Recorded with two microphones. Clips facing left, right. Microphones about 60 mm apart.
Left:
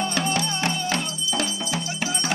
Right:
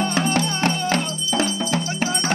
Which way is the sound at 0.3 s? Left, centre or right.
Right.